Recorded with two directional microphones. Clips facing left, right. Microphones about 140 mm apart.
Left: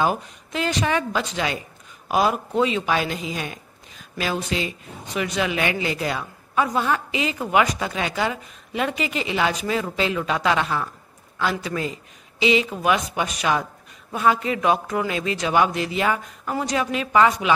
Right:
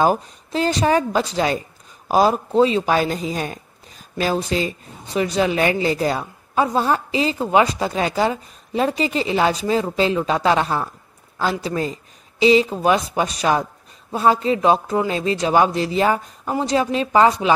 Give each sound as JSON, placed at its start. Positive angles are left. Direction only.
{"t": 0.0, "sound": "speech", "side_deg": -35}